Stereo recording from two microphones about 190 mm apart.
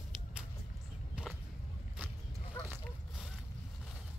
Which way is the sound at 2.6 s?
10° left (ahead or behind).